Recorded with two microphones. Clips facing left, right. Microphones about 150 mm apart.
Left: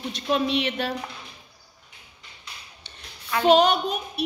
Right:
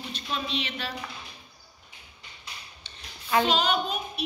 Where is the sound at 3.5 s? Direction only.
60° left (ahead or behind).